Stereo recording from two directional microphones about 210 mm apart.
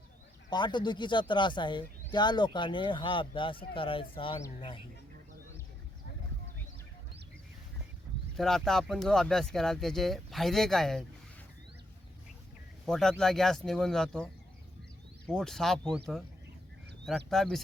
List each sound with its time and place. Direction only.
0.5 s speech: 20° left (ahead or behind)
8.4 s speech: centre (ahead or behind)
12.8 s speech: centre (ahead or behind)
15.3 s speech: centre (ahead or behind)
17.1 s speech: centre (ahead or behind)